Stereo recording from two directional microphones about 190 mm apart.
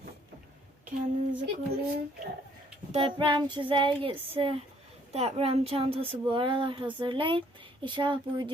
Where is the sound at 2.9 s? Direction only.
25° right (ahead or behind).